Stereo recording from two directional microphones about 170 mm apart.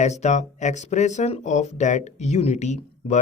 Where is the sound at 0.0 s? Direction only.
40° left (ahead or behind).